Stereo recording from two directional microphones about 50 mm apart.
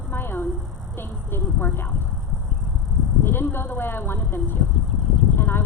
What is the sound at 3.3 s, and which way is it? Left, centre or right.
Speech, left.